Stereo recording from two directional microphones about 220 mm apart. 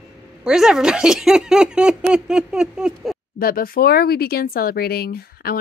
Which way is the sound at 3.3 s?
40° left (ahead or behind).